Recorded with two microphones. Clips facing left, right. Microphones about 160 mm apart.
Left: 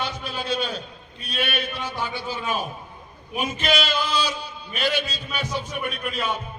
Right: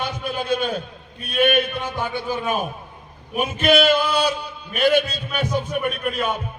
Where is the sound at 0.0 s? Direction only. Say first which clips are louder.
Right 4 dB; 50° right (ahead or behind).